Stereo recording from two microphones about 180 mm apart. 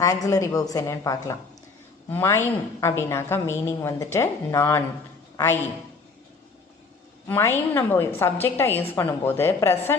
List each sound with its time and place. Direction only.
0.0 s a woman's voice: 15° left (ahead or behind)
7.3 s a woman's voice: 15° left (ahead or behind)